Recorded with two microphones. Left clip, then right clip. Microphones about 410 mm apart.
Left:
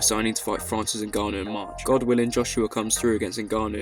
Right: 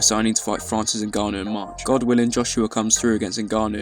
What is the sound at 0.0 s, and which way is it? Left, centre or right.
Speech, left.